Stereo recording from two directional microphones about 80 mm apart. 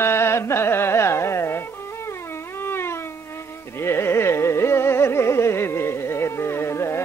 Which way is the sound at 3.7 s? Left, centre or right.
Left.